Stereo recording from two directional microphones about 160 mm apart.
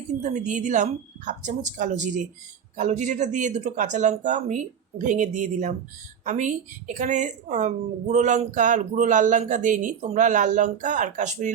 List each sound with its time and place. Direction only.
0.2 s a woman's voice: 50° right (ahead or behind)